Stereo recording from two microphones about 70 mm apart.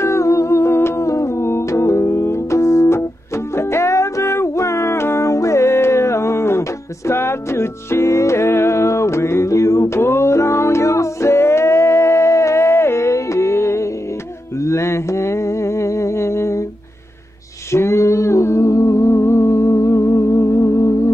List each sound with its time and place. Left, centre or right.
0.0 s humming: left
3.5 s music: left
14.6 s mantra: left
17.6 s music: left